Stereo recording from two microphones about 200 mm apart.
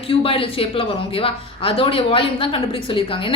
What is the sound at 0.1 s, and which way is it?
Speech, 30° left (ahead or behind).